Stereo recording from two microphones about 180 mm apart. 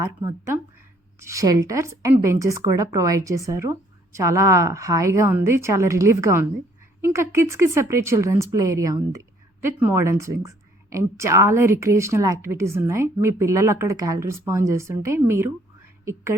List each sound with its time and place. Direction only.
0.0 s speech: 15° right (ahead or behind)